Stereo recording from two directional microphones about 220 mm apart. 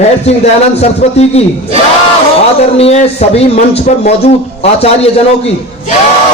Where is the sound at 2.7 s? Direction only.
30° left (ahead or behind).